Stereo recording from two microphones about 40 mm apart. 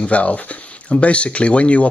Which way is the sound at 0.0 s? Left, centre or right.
Left.